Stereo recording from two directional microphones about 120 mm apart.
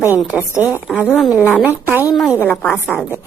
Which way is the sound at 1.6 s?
15° right (ahead or behind).